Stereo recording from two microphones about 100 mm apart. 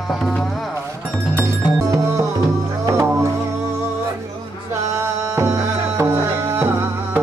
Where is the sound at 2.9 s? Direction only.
30° right (ahead or behind).